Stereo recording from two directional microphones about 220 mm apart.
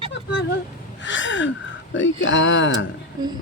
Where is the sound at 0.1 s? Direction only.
50° left (ahead or behind).